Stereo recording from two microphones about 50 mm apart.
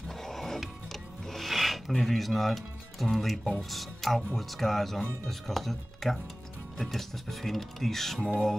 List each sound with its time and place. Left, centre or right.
0.2 s music: centre
3.7 s speech: centre
8.2 s music: centre